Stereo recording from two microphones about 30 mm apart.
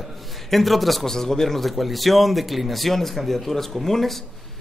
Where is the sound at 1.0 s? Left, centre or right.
Centre.